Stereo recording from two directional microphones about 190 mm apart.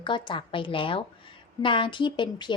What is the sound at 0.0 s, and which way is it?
A woman's voice, 25° left (ahead or behind).